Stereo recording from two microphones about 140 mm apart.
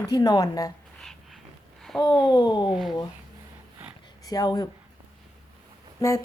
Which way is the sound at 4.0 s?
25° left (ahead or behind).